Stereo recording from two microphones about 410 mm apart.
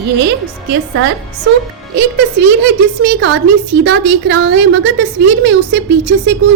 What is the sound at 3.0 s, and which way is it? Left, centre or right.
A woman's voice, right.